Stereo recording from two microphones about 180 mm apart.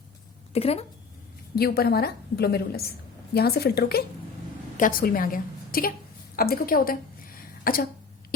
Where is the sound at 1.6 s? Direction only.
60° left (ahead or behind).